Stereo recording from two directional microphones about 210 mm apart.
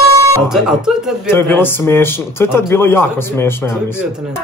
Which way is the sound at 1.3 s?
10° left (ahead or behind).